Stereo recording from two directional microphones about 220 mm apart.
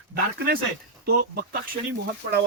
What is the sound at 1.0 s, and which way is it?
Speech, 45° right (ahead or behind).